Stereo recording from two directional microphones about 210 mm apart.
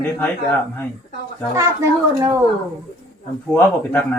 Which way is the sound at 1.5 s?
15° right (ahead or behind).